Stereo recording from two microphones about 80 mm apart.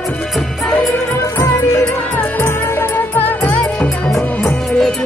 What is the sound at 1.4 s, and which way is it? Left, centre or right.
Music, left.